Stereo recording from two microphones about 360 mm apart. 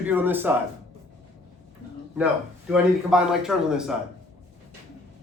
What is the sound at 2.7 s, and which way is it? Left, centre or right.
A man's voice, centre.